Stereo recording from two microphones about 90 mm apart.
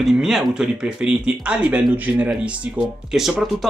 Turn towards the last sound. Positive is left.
turn(degrees=-5)  # may be behind; listen again after turning